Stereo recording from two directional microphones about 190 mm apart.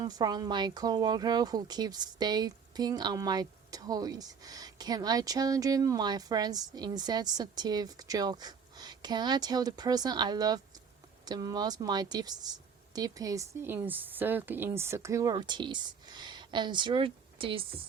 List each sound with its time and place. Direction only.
0.0 s speech: 20° right (ahead or behind)